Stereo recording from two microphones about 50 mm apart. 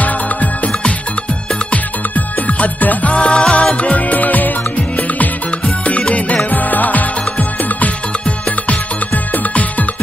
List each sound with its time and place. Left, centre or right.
0.0 s music: left